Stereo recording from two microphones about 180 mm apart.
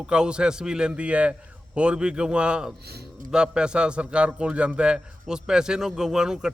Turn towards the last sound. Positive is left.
turn(degrees=-5)  # may be behind; listen again after turning